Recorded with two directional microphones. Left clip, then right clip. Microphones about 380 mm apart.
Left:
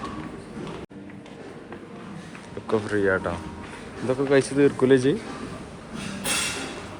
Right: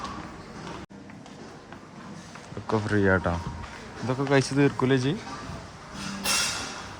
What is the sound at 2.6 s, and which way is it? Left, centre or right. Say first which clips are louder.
Speech: left 1 dB; centre.